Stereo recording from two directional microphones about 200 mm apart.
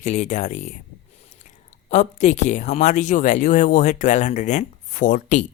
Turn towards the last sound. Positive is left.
turn(degrees=40)  # may be behind; listen again after turning